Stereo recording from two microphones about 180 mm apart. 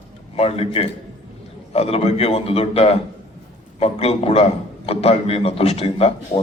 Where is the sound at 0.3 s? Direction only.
35° left (ahead or behind).